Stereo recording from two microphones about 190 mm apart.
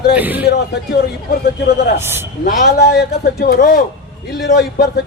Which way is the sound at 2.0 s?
10° right (ahead or behind).